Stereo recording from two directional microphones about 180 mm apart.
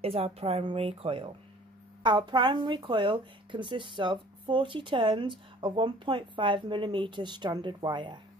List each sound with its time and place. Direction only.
0.0 s a woman's voice: 35° right (ahead or behind)